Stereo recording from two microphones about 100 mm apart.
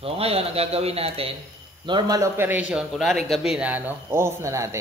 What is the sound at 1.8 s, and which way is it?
Speech, 50° right (ahead or behind).